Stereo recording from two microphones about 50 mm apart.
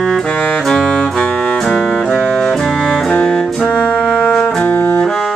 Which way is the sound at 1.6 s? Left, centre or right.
Centre.